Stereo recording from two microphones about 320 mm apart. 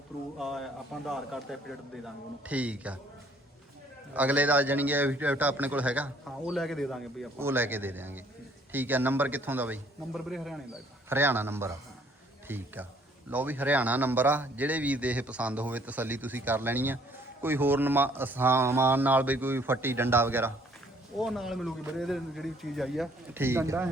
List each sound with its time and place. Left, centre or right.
0.3 s a man's voice: centre
4.1 s a man's voice: centre